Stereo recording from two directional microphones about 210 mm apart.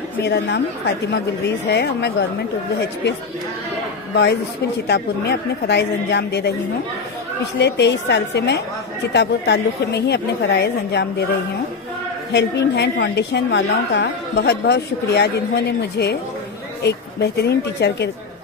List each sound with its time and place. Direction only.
0.2 s a woman's voice: 50° left (ahead or behind)
7.5 s a woman's voice: 55° left (ahead or behind)
12.3 s a woman's voice: 55° left (ahead or behind)